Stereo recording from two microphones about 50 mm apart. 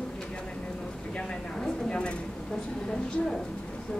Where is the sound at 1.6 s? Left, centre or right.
Centre.